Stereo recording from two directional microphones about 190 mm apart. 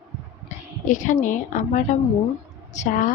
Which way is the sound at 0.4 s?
40° left (ahead or behind).